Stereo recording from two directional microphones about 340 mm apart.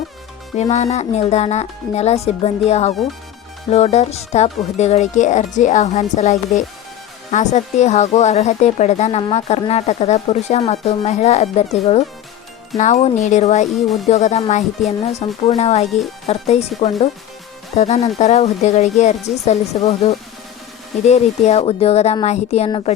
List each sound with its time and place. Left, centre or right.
0.5 s speech: centre